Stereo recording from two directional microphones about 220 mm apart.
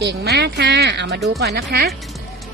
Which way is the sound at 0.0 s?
50° right (ahead or behind).